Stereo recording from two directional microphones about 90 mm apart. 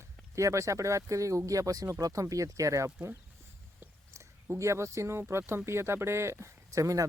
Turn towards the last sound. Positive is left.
turn(degrees=-35)  # may be behind; listen again after turning